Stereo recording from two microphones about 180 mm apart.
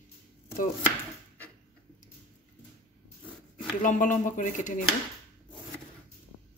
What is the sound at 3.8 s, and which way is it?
Speech, 45° left (ahead or behind).